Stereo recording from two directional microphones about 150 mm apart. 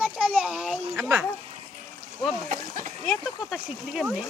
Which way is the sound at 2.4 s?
55° right (ahead or behind).